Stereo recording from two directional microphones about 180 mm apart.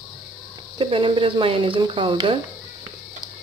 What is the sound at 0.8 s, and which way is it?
Speech, 30° right (ahead or behind).